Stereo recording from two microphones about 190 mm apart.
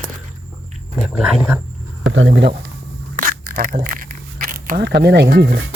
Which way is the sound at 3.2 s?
45° right (ahead or behind).